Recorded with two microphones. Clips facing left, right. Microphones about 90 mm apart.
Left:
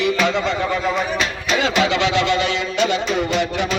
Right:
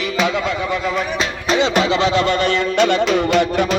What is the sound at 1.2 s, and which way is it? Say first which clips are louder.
Music: right 3 dB; 30° right (ahead or behind).